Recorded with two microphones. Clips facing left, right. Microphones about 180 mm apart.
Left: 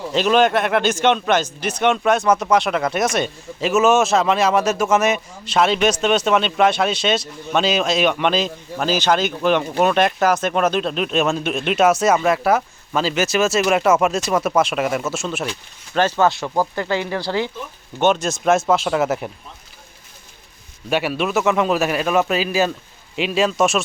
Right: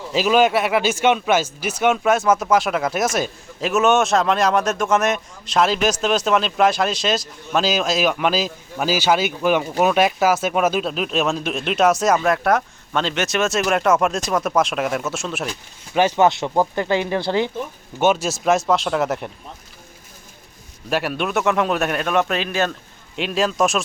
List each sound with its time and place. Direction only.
0.1 s speech: 5° right (ahead or behind)
16.0 s speech: 15° right (ahead or behind)
18.0 s speech: 5° right (ahead or behind)
20.9 s speech: centre (ahead or behind)